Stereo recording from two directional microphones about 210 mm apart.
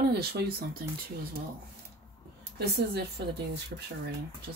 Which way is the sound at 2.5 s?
50° right (ahead or behind).